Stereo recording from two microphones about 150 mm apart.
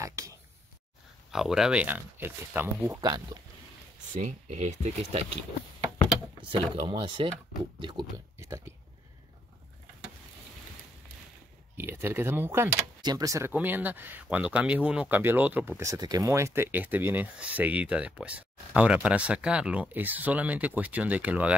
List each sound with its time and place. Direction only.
0.0 s a sound: 20° right (ahead or behind)
1.3 s speech: 5° right (ahead or behind); by 3.5 s 25° right (ahead or behind)
4.1 s speech: 55° right (ahead or behind)
6.5 s speech: 35° right (ahead or behind)
8.4 s speech: 20° right (ahead or behind)
11.7 s speech: 15° right (ahead or behind)
15.8 s speech: 20° right (ahead or behind)